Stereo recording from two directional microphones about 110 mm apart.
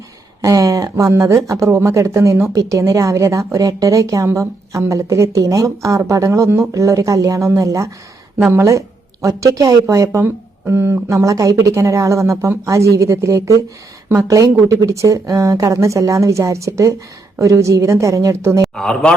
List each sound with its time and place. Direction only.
0.4 s a woman's voice: 30° right (ahead or behind)
18.6 s speech: 5° left (ahead or behind)